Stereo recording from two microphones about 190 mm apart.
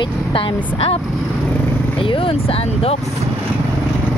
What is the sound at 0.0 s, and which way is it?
Speech, 25° left (ahead or behind).